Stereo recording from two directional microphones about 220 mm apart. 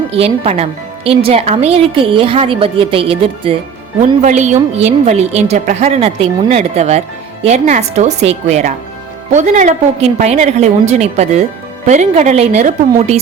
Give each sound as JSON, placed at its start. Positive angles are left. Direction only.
{"t": 0.1, "sound": "a woman's voice", "side_deg": -30}